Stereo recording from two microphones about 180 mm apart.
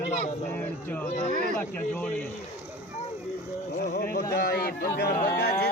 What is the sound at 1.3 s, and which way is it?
Speech, 45° right (ahead or behind).